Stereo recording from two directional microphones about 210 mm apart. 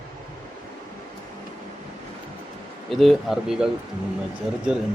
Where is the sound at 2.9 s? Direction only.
Centre (ahead or behind).